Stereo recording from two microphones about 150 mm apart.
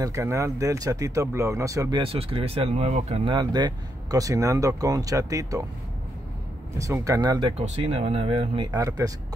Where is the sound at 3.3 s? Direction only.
30° right (ahead or behind).